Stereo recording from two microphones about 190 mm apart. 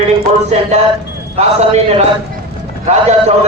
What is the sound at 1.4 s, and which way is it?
Speech, 35° right (ahead or behind).